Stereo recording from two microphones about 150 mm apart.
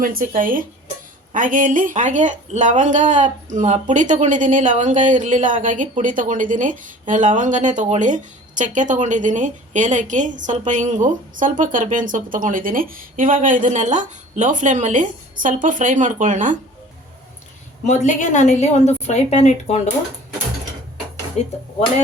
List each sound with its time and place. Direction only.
0.0 s speech: 70° right (ahead or behind)
17.8 s a woman's voice: 55° left (ahead or behind)
21.4 s a woman's voice: 45° left (ahead or behind)